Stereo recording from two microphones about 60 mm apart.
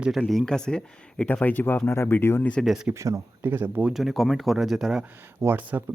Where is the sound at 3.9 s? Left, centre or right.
Centre.